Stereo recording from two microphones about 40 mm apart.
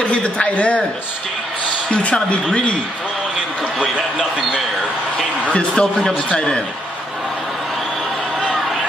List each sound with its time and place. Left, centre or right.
0.0 s speech: left
5.5 s a man's voice: left